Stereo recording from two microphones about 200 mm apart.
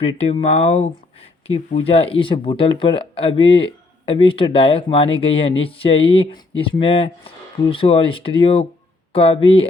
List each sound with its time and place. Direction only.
0.0 s speech: 30° left (ahead or behind)